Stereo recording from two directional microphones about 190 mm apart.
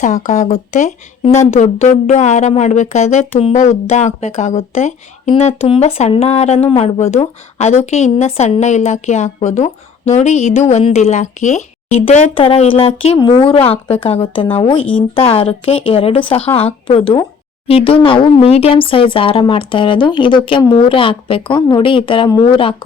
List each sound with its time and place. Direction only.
0.0 s a woman's voice: 40° left (ahead or behind)
17.7 s speech: 30° left (ahead or behind)